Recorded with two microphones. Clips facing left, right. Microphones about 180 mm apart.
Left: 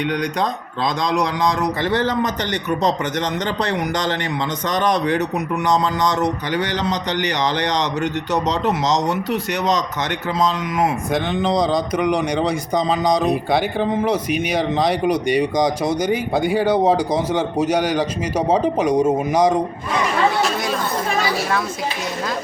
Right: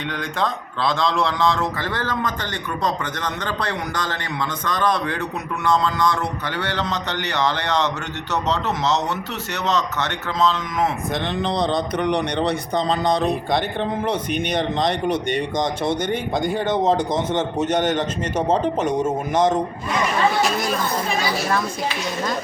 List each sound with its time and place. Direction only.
0.0 s a man's voice: 20° left (ahead or behind)
11.4 s speech: 5° left (ahead or behind)
15.8 s speech: 25° right (ahead or behind)
16.0 s a man's voice: 5° left (ahead or behind)